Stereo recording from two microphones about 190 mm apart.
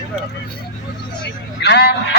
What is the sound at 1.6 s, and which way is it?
Speech, 60° left (ahead or behind).